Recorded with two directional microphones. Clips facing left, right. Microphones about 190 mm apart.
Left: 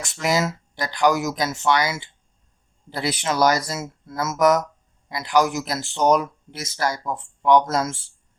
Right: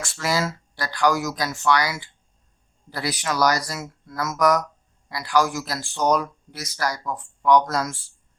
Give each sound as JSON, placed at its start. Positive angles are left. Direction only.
{"t": 0.0, "sound": "speech", "side_deg": 20}